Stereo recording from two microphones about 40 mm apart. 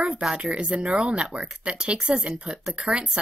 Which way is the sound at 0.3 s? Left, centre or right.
Right.